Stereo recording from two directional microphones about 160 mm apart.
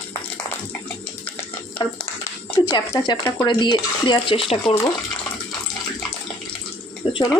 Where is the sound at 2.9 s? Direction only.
25° left (ahead or behind).